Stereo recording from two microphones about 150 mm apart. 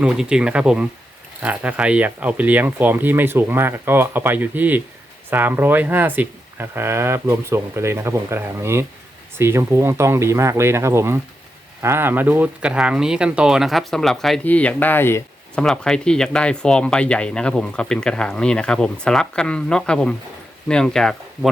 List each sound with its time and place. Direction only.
0.0 s speech: 5° right (ahead or behind); by 15.6 s 15° left (ahead or behind)
15.6 s speech: 5° left (ahead or behind)